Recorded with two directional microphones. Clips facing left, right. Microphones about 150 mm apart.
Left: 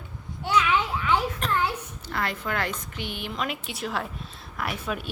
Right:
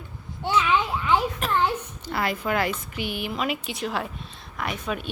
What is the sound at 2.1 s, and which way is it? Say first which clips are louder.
A woman's voice: right 4 dB; 10° right (ahead or behind).